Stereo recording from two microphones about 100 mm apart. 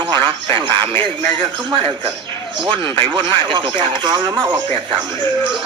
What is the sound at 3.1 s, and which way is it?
Speech, 50° right (ahead or behind).